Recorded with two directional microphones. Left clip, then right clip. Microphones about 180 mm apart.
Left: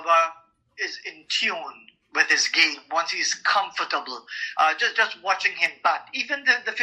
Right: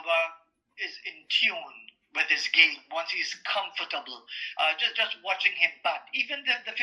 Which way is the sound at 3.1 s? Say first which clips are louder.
Left 5 dB; 45° left (ahead or behind).